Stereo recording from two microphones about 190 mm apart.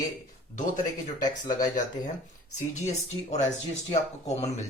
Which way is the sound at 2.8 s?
35° left (ahead or behind).